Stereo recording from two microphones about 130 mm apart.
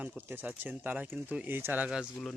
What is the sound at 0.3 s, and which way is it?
Speech, 15° right (ahead or behind).